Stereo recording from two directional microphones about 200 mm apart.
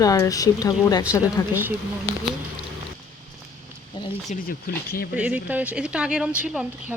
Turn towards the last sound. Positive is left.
turn(degrees=-5)  # may be behind; listen again after turning